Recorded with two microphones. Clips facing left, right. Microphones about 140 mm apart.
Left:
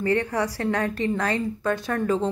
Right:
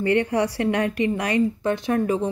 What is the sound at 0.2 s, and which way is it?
Speech, 20° right (ahead or behind).